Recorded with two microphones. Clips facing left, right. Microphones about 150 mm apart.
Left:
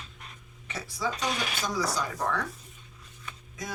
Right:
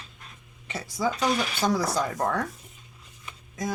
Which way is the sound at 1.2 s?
65° right (ahead or behind).